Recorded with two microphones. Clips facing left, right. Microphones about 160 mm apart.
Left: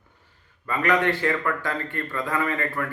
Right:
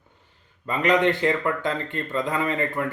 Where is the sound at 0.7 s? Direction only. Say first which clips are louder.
Right 2 dB; 20° right (ahead or behind).